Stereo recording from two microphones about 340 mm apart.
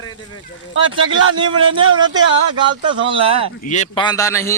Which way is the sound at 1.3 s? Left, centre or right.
Centre.